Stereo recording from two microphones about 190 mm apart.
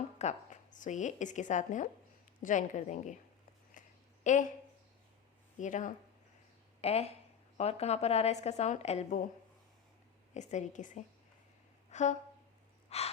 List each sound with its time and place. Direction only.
0.2 s a woman's voice: 40° left (ahead or behind)
3.8 s a sound: 40° left (ahead or behind)
5.5 s a woman's voice: 40° left (ahead or behind)
10.3 s a woman's voice: 40° left (ahead or behind)
11.9 s a sound: 40° left (ahead or behind)
12.9 s gasp: 35° left (ahead or behind)